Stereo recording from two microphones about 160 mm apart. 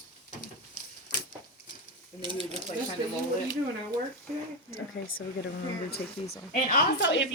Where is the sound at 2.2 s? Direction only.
30° right (ahead or behind).